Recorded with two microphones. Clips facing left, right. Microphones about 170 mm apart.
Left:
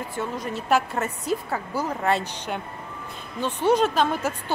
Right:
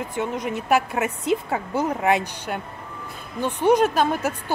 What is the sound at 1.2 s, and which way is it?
A woman's voice, 20° right (ahead or behind).